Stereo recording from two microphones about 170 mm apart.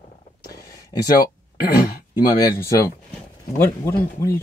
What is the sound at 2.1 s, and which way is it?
Speech, 20° left (ahead or behind).